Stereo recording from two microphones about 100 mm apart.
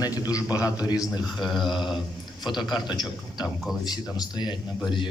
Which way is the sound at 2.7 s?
45° left (ahead or behind).